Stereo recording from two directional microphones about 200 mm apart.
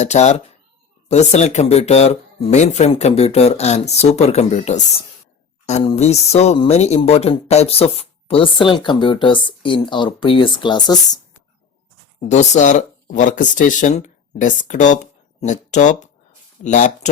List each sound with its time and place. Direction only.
0.0 s speech: 35° left (ahead or behind)
12.3 s speech: 35° left (ahead or behind)